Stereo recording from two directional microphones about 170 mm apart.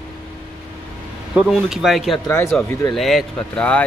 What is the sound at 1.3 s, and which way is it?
A man's voice, 5° right (ahead or behind).